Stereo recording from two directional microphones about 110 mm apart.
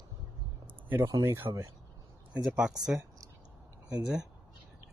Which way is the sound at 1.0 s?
30° right (ahead or behind).